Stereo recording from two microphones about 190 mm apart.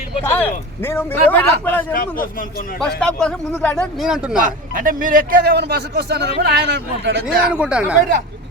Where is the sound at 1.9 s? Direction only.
45° left (ahead or behind).